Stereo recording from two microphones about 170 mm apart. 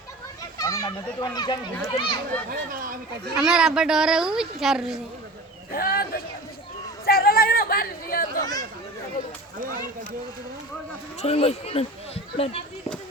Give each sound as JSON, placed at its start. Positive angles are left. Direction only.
{"t": 0.6, "sound": "a child's voice", "side_deg": 20}
{"t": 2.5, "sound": "speech", "side_deg": -55}
{"t": 3.3, "sound": "a woman's voice", "side_deg": -5}
{"t": 5.7, "sound": "speech", "side_deg": 60}
{"t": 7.0, "sound": "chatter", "side_deg": 60}
{"t": 11.2, "sound": "speech", "side_deg": 35}